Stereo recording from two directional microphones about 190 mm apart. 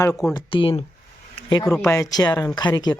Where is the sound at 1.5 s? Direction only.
20° left (ahead or behind).